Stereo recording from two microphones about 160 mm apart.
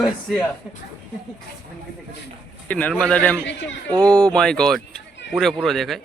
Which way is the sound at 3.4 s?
90° left.